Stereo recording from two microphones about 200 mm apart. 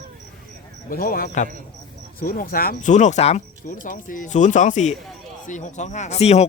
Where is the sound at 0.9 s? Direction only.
45° left (ahead or behind).